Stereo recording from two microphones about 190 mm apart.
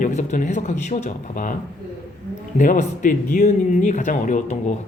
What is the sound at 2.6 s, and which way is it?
Speech, 45° left (ahead or behind).